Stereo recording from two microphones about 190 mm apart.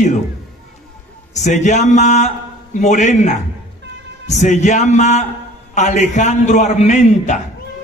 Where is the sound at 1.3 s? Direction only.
40° left (ahead or behind).